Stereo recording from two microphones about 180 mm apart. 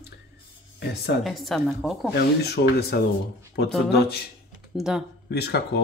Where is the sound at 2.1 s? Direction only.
65° left (ahead or behind).